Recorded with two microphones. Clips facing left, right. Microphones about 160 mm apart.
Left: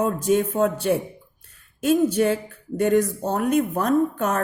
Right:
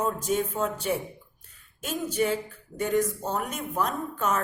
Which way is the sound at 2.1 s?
60° left (ahead or behind).